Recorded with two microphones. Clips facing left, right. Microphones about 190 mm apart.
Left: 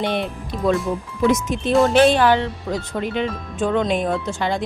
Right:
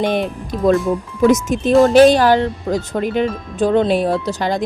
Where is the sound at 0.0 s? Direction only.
45° right (ahead or behind).